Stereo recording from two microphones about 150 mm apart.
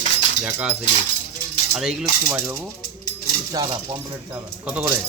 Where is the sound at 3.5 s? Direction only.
25° right (ahead or behind).